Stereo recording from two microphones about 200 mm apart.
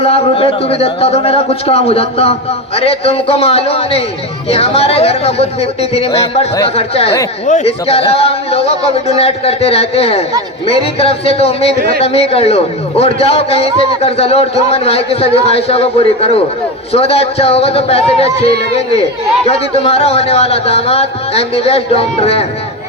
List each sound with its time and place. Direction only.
0.0 s a man's voice: 30° left (ahead or behind)